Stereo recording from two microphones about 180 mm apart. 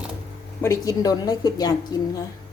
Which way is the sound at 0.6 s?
15° left (ahead or behind).